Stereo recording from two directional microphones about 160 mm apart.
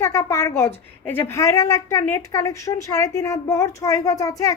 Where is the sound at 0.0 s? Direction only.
20° left (ahead or behind).